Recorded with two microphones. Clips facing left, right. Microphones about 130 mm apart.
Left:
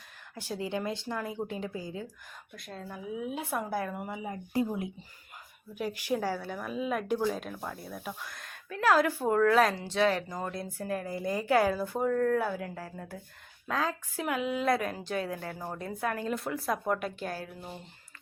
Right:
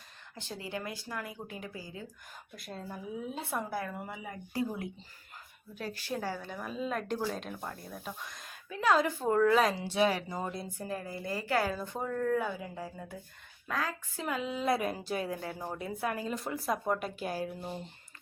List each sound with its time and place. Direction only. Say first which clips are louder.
0.3 s speech: left 6 dB; 10° left (ahead or behind)
2.6 s a woman's voice: even; 5° right (ahead or behind)
3.2 s a woman's voice: left 3 dB; 10° left (ahead or behind)
11.1 s a woman's voice: left 5 dB; 15° left (ahead or behind); by 13.1 s centre (ahead or behind)
13.7 s a woman's voice: left 4 dB; 15° left (ahead or behind)
14.8 s a woman's voice: left 1 dB; 10° right (ahead or behind)
16.0 s a woman's voice: left 3 dB; 10° right (ahead or behind)
16.6 s a woman's voice: right 1 dB; centre (ahead or behind)
17.2 s a woman's voice: right 2 dB; 15° right (ahead or behind)